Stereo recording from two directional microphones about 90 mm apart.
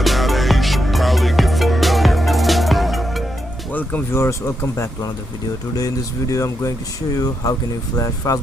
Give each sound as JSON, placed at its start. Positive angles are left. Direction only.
{"t": 0.0, "sound": "music", "side_deg": 0}
{"t": 3.7, "sound": "music", "side_deg": 20}
{"t": 4.1, "sound": "speech", "side_deg": 30}
{"t": 6.3, "sound": "speech", "side_deg": 35}
{"t": 7.9, "sound": "speech", "side_deg": 40}